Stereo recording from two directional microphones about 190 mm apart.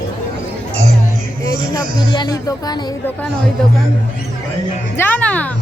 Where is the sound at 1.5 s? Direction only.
20° left (ahead or behind).